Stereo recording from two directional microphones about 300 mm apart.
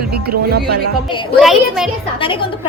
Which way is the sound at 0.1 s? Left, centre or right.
Right.